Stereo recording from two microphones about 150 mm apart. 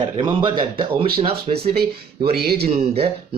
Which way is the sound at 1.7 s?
90° right.